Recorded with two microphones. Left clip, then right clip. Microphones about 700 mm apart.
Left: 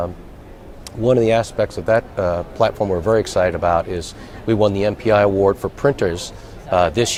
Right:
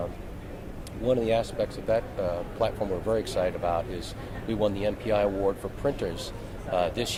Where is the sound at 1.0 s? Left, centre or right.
Left.